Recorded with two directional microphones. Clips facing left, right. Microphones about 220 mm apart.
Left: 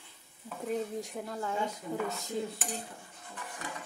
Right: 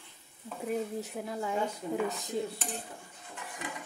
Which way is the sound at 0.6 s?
5° right (ahead or behind).